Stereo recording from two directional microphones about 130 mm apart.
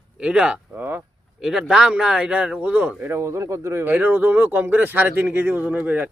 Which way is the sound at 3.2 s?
20° right (ahead or behind).